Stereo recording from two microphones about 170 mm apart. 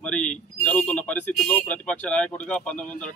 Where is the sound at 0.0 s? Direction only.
5° left (ahead or behind).